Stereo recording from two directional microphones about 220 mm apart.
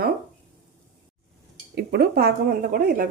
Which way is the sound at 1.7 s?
45° right (ahead or behind).